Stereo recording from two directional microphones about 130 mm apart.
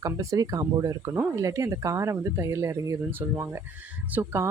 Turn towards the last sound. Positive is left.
turn(degrees=-20)  # may be behind; listen again after turning